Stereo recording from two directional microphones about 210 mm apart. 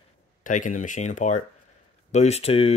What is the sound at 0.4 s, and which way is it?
Speech, 35° left (ahead or behind).